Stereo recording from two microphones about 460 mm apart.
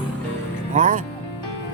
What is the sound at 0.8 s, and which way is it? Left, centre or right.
Speech, centre.